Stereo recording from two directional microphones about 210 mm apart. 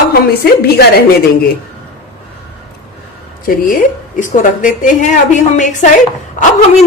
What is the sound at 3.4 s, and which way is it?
A woman's voice, 40° left (ahead or behind).